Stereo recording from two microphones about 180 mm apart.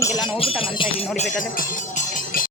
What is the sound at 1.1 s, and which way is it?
Speech, 45° left (ahead or behind).